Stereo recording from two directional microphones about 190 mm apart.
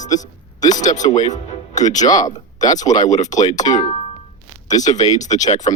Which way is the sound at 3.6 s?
25° left (ahead or behind).